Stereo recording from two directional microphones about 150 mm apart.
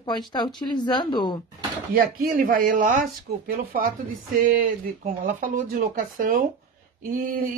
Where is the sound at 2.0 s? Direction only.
70° right (ahead or behind).